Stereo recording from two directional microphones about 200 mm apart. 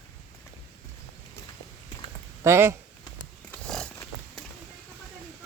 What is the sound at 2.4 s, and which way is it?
Speech, 15° right (ahead or behind).